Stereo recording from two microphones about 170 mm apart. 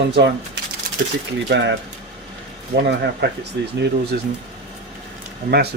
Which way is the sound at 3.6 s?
90° right.